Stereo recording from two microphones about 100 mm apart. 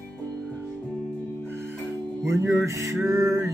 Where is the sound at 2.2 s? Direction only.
30° right (ahead or behind).